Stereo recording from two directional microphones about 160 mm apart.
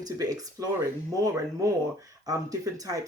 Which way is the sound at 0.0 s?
20° right (ahead or behind).